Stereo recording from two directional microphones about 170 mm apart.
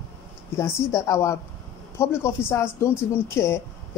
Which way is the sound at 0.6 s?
20° left (ahead or behind).